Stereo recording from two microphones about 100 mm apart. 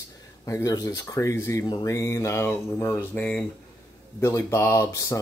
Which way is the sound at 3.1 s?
20° left (ahead or behind).